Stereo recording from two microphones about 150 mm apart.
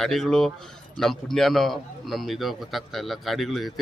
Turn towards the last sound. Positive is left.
turn(degrees=0)  # may be behind; listen again after turning